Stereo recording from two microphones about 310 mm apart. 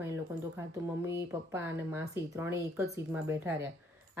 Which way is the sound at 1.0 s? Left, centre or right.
Centre.